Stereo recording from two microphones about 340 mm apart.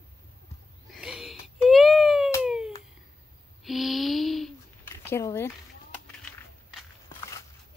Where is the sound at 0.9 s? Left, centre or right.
Centre.